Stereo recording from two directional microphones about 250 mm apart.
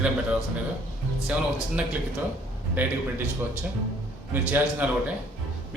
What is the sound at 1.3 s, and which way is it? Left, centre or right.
Speech, centre.